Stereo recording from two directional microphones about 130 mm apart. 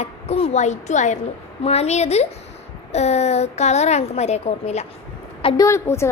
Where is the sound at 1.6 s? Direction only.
55° left (ahead or behind).